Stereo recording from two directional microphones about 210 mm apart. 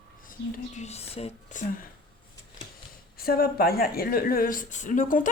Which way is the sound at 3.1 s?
45° left (ahead or behind).